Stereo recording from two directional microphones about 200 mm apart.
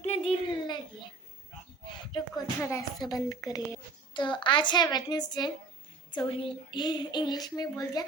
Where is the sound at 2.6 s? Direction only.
15° left (ahead or behind).